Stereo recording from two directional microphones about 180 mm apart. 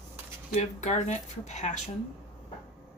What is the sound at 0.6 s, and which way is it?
Speech, 40° left (ahead or behind).